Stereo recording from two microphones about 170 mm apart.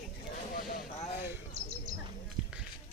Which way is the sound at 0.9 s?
40° left (ahead or behind).